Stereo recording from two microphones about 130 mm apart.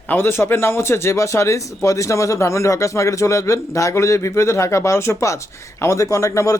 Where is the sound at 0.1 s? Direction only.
20° left (ahead or behind).